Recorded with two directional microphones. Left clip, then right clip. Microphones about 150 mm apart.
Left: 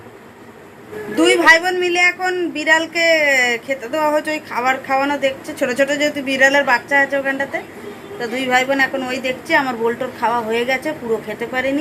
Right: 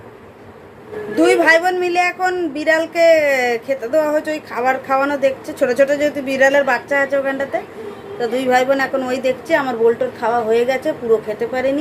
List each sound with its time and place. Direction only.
1.1 s speech: centre (ahead or behind)